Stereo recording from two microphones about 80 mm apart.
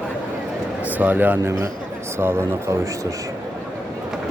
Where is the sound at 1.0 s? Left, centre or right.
Right.